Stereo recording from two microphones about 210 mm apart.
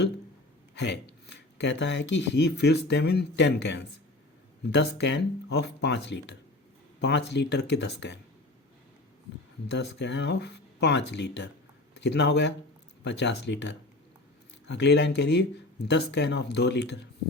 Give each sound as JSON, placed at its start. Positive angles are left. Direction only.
{"t": 0.8, "sound": "speech", "side_deg": 55}
{"t": 9.6, "sound": "speech", "side_deg": 55}